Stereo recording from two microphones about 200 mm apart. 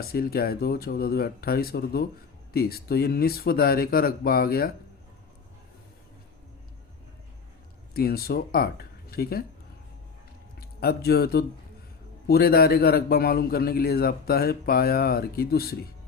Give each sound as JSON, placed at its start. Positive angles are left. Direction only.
{"t": 0.0, "sound": "a man's voice", "side_deg": 50}
{"t": 7.9, "sound": "speech", "side_deg": 50}
{"t": 10.6, "sound": "a man's voice", "side_deg": 50}